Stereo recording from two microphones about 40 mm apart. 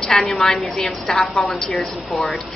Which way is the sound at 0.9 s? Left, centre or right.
Centre.